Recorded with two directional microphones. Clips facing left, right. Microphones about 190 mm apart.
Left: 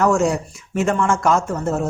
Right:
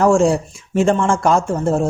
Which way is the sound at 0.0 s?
30° right (ahead or behind).